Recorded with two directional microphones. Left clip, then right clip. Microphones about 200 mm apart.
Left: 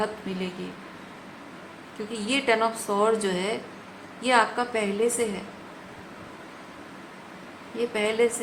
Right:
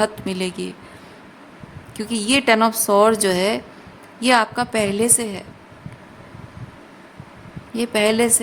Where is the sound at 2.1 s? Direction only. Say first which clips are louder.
Right 7 dB; 60° right (ahead or behind).